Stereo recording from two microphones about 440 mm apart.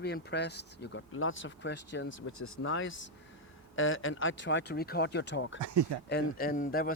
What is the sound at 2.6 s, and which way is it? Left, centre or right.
Speech, left.